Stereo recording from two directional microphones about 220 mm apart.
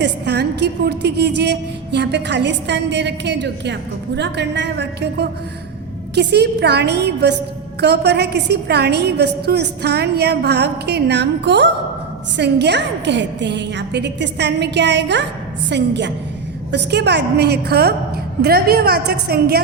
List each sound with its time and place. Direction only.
0.0 s a woman's voice: 50° right (ahead or behind)